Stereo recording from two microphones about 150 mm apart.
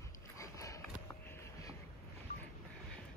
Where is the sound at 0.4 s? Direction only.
20° left (ahead or behind).